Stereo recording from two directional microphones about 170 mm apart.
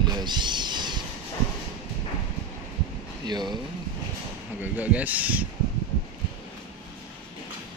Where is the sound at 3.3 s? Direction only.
25° right (ahead or behind).